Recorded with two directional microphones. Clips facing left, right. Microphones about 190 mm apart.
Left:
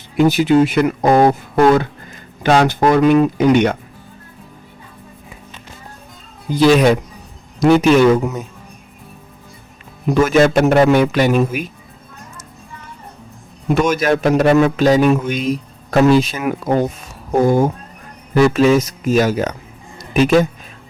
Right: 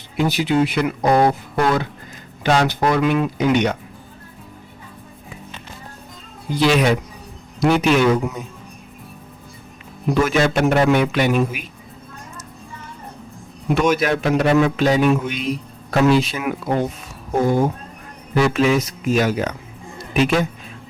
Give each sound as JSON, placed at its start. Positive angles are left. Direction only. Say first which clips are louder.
{"t": 0.2, "sound": "a man's voice", "louder": "left 6 dB", "side_deg": 50}
{"t": 6.6, "sound": "a man's voice", "louder": "left 5 dB", "side_deg": 40}
{"t": 10.2, "sound": "a man's voice", "louder": "left 7 dB", "side_deg": 45}
{"t": 13.9, "sound": "a man's voice", "louder": "left 4 dB", "side_deg": 45}